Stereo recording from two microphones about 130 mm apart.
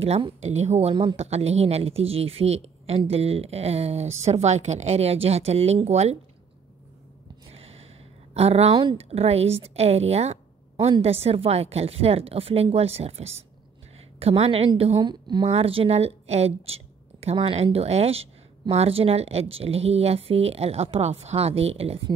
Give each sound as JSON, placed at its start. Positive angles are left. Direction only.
{"t": 0.4, "sound": "a woman's voice", "side_deg": -60}
{"t": 7.5, "sound": "gasp", "side_deg": -50}
{"t": 8.4, "sound": "a woman's voice", "side_deg": -50}
{"t": 15.0, "sound": "a woman's voice", "side_deg": -35}
{"t": 15.5, "sound": "a woman's voice", "side_deg": -45}